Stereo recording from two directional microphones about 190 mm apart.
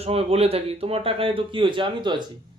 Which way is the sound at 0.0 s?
30° right (ahead or behind).